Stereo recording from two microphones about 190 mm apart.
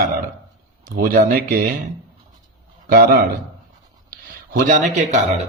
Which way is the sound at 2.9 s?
50° right (ahead or behind).